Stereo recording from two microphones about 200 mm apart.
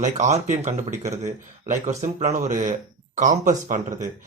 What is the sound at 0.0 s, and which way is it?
Speech, 35° right (ahead or behind).